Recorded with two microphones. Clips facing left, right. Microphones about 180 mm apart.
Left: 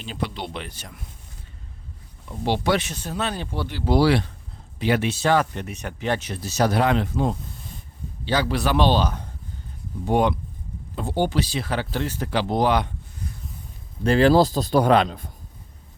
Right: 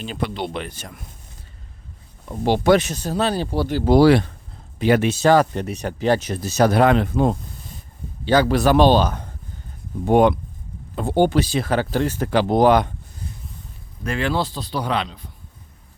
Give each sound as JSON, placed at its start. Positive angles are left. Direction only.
{"t": 0.0, "sound": "speech", "side_deg": -55}
{"t": 2.2, "sound": "speech", "side_deg": -45}
{"t": 14.0, "sound": "a man's voice", "side_deg": 35}